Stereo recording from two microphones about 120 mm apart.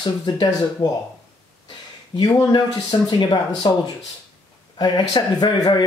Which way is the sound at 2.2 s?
35° left (ahead or behind).